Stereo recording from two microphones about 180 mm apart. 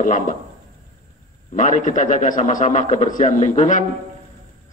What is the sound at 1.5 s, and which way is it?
A man's voice, 45° left (ahead or behind).